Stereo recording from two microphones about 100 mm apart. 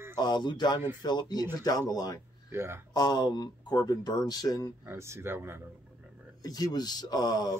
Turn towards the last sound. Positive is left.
turn(degrees=40)  # may be behind; listen again after turning